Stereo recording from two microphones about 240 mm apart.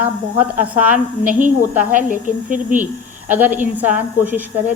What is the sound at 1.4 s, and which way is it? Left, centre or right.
Speech, centre.